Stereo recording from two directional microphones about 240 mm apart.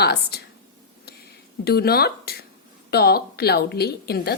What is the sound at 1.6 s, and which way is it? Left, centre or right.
A woman's voice, left.